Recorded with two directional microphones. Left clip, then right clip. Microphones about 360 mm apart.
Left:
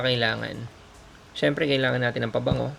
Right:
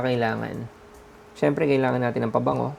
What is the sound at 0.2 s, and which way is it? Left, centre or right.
Speech, right.